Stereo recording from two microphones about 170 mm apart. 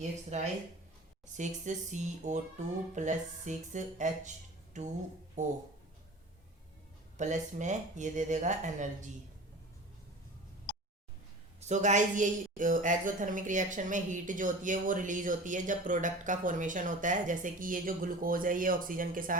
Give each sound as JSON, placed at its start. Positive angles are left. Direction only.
{"t": 0.3, "sound": "a woman's voice", "side_deg": -40}
{"t": 7.2, "sound": "a woman's voice", "side_deg": -45}
{"t": 11.6, "sound": "a woman's voice", "side_deg": -45}